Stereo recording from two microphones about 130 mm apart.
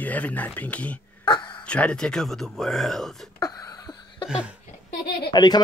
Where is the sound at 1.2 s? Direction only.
35° left (ahead or behind).